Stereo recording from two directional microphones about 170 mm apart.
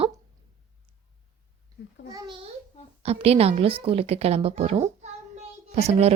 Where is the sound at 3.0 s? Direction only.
35° right (ahead or behind).